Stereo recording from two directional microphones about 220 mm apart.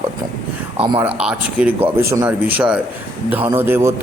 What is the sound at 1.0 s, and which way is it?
Speech, 5° right (ahead or behind).